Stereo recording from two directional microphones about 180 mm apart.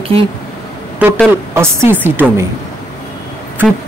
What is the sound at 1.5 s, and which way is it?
Speech, 10° right (ahead or behind).